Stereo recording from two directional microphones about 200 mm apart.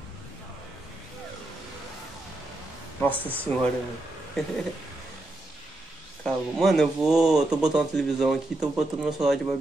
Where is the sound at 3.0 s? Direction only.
10° left (ahead or behind).